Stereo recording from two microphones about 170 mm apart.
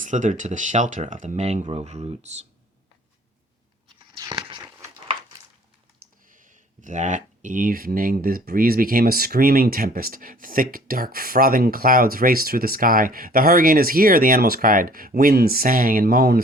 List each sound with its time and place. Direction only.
0.0 s speech: 45° right (ahead or behind)
4.1 s a sound: 30° right (ahead or behind)
6.2 s speech: 50° right (ahead or behind)